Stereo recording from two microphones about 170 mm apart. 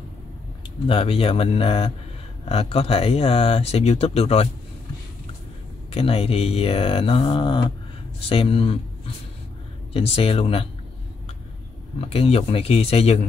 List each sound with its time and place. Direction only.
0.8 s speech: 35° left (ahead or behind)
5.9 s speech: 35° left (ahead or behind)
9.9 s speech: 35° left (ahead or behind)
12.0 s speech: 35° left (ahead or behind)